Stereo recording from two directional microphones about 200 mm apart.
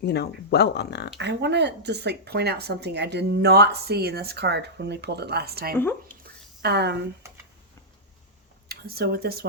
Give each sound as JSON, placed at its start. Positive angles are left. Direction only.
{"t": 0.0, "sound": "speech", "side_deg": 55}
{"t": 1.2, "sound": "speech", "side_deg": -60}
{"t": 5.7, "sound": "speech", "side_deg": 10}
{"t": 6.6, "sound": "speech", "side_deg": -55}
{"t": 8.7, "sound": "speech", "side_deg": -50}